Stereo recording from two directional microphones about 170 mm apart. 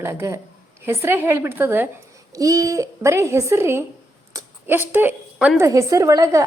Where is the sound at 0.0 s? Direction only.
15° right (ahead or behind).